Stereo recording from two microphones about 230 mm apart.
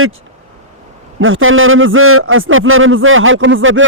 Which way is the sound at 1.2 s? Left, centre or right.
Right.